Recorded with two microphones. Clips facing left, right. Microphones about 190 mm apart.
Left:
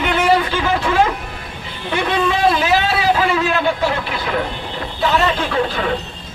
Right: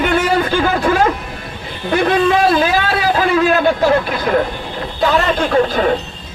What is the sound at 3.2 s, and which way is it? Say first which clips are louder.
Speech: right 4 dB; 40° right (ahead or behind).